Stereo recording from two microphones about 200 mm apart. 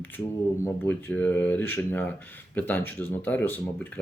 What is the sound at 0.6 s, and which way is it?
Speech, 10° left (ahead or behind).